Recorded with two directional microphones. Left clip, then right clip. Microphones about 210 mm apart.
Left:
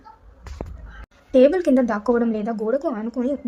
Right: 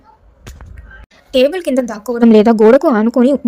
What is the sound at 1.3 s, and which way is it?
A woman's voice, 40° right (ahead or behind).